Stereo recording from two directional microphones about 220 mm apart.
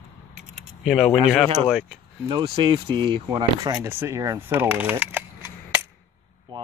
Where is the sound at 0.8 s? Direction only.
Centre (ahead or behind).